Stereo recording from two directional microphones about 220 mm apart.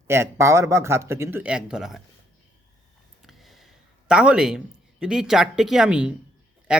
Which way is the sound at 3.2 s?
Centre (ahead or behind).